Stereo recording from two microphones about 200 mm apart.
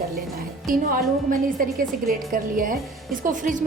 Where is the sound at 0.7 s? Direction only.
45° right (ahead or behind).